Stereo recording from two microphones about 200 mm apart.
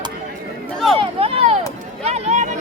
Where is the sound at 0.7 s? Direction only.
Centre (ahead or behind).